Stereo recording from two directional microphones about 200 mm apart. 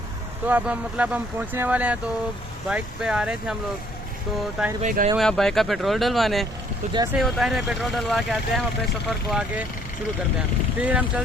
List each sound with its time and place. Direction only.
0.4 s speech: 5° right (ahead or behind)
4.8 s speech: 40° right (ahead or behind)
5.1 s speech: centre (ahead or behind)
6.9 s speech: 15° right (ahead or behind)
7.2 s speech: centre (ahead or behind)
10.8 s speech: 10° right (ahead or behind)